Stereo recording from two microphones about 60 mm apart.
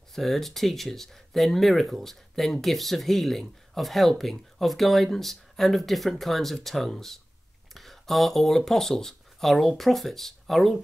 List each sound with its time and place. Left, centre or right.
0.1 s speech: centre